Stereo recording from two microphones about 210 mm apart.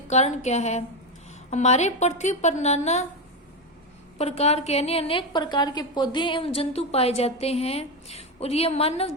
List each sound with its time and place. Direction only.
0.1 s a woman's voice: 35° left (ahead or behind)
4.2 s a woman's voice: 30° left (ahead or behind)